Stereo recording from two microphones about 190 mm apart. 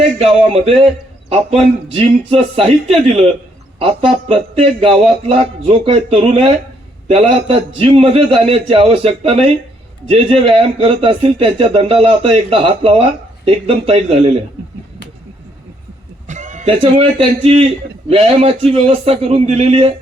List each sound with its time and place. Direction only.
0.2 s a man's voice: 30° right (ahead or behind)
16.2 s a sound: 40° right (ahead or behind)
16.8 s a man's voice: 30° right (ahead or behind)